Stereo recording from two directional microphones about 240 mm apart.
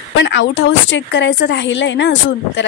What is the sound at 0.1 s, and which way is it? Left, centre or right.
A woman's voice, left.